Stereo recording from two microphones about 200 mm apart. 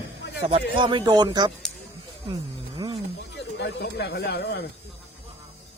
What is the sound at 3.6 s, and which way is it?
Speech, 55° left (ahead or behind).